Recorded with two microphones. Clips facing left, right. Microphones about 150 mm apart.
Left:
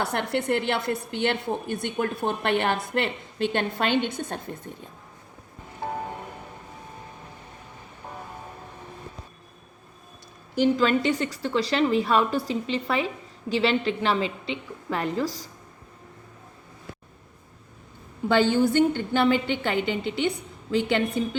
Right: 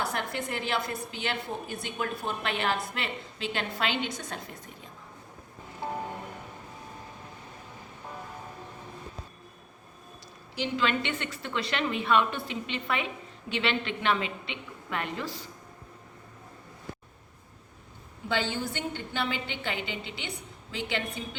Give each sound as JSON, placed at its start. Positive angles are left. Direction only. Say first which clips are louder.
{"t": 0.0, "sound": "a woman's voice", "louder": "left 6 dB", "side_deg": 65}
{"t": 10.5, "sound": "a woman's voice", "louder": "left 8 dB", "side_deg": 45}
{"t": 18.3, "sound": "a woman's voice", "louder": "left 10 dB", "side_deg": 55}